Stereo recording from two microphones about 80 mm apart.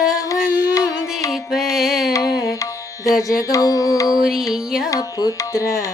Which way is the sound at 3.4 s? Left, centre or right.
Left.